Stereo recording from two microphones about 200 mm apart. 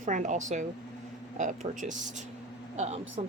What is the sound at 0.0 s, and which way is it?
Speech, 40° right (ahead or behind).